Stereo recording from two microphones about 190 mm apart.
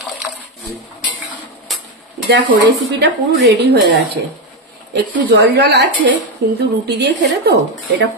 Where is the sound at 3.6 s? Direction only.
60° right (ahead or behind).